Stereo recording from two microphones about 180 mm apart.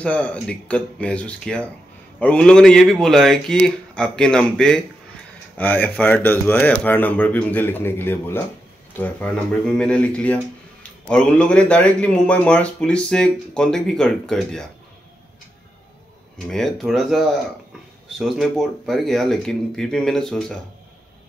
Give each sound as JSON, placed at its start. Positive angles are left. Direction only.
{"t": 0.0, "sound": "speech", "side_deg": 5}
{"t": 16.3, "sound": "speech", "side_deg": 0}